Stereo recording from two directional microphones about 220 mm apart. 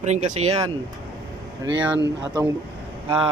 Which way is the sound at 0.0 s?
30° right (ahead or behind).